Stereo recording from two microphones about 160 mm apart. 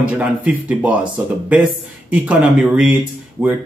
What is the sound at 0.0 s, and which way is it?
Speech, 10° right (ahead or behind).